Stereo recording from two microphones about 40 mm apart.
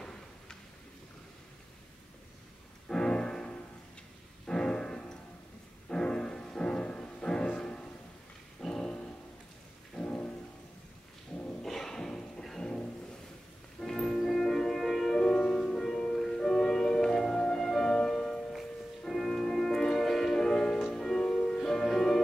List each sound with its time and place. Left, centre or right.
0.0 s a sound: centre
2.9 s music: centre
10.0 s rain: left
11.6 s music: centre
13.9 s music: centre
15.1 s music: left